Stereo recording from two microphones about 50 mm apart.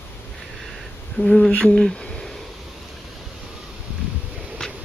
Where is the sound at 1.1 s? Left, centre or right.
Centre.